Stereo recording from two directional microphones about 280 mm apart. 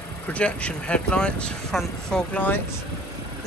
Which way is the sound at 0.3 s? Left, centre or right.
Centre.